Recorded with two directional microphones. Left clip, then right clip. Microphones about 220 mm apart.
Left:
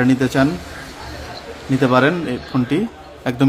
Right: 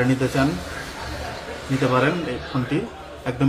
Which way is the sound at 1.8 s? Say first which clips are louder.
Left 5 dB; 50° left (ahead or behind).